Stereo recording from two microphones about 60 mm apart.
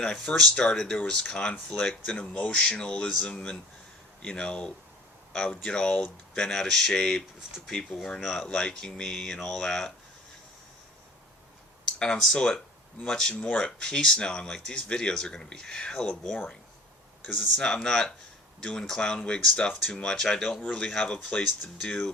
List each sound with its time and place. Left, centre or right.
0.0 s speech: centre
11.9 s speech: centre
17.6 s speech: centre